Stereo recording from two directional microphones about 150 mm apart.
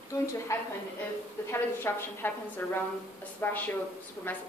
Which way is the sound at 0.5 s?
15° left (ahead or behind).